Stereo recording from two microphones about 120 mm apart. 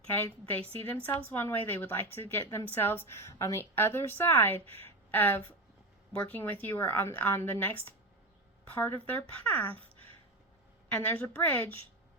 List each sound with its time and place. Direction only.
0.1 s speech: 15° left (ahead or behind)
10.9 s speech: 15° left (ahead or behind)